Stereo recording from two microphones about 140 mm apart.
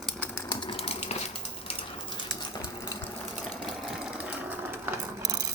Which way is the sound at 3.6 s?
Centre (ahead or behind).